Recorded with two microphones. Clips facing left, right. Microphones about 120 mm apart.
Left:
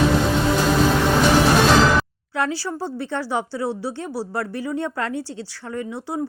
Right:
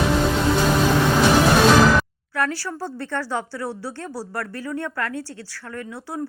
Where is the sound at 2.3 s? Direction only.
20° left (ahead or behind).